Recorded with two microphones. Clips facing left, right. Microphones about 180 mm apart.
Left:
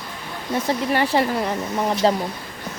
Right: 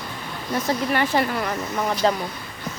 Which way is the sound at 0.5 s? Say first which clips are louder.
Left 1 dB; 30° left (ahead or behind).